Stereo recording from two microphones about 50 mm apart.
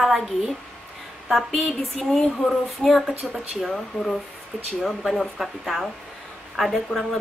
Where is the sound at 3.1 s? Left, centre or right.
Right.